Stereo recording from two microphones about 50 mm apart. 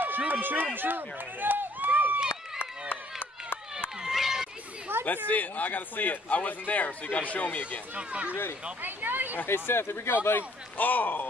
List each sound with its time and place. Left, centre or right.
0.2 s speech: right
2.9 s run: left
4.0 s run: centre
5.0 s speech: left
7.9 s speech: right
8.8 s speech: right
9.5 s speech: left
10.8 s speech: left